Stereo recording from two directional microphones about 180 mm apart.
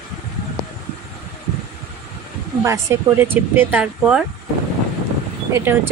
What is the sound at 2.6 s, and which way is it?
Speech, 15° right (ahead or behind).